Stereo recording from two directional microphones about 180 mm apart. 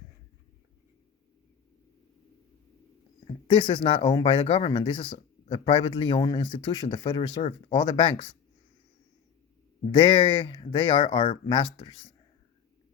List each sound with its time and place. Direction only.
3.4 s speech: 25° left (ahead or behind)
9.9 s speech: 30° left (ahead or behind)